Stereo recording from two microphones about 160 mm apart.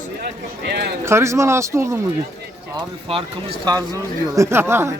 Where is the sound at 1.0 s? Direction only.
15° right (ahead or behind).